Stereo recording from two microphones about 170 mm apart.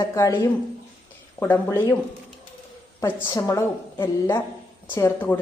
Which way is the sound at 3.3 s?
20° left (ahead or behind).